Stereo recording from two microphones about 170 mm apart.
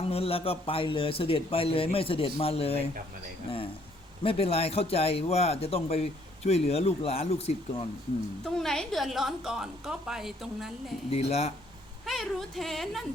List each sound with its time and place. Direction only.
0.0 s a man's voice: 35° left (ahead or behind)
4.2 s a man's voice: 35° left (ahead or behind)
8.5 s a woman's voice: 5° left (ahead or behind)
11.2 s a man's voice: 40° left (ahead or behind)
12.0 s a woman's voice: centre (ahead or behind)